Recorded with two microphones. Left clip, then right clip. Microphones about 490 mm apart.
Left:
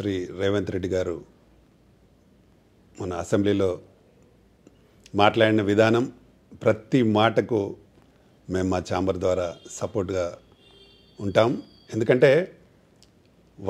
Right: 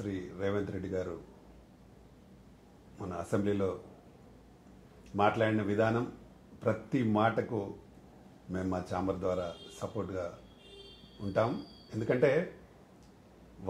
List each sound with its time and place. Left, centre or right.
0.0 s speech: left
3.0 s speech: left
5.1 s speech: left
11.9 s speech: left